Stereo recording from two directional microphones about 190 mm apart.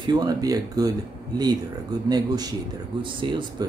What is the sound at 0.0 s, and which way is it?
Speech, 20° right (ahead or behind).